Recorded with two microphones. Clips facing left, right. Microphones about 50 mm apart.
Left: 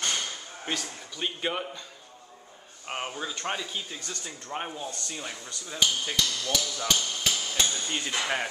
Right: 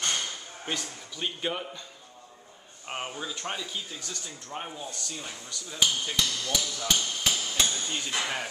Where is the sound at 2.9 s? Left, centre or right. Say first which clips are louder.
Left 1 dB; centre; by 4.6 s left.